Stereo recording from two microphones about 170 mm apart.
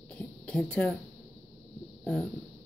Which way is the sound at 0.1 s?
5° left (ahead or behind).